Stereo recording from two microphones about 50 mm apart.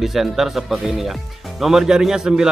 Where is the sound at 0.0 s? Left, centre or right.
Centre.